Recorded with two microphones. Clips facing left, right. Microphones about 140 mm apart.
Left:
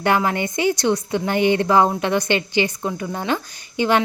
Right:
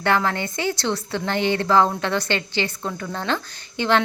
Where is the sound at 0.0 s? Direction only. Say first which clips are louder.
Left 2 dB; 15° left (ahead or behind).